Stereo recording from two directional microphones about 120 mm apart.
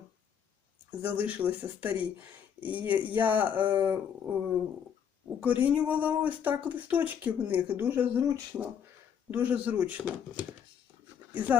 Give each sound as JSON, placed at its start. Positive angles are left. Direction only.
{"t": 0.9, "sound": "speech", "side_deg": -15}
{"t": 3.6, "sound": "speech", "side_deg": -40}
{"t": 3.8, "sound": "speech", "side_deg": -15}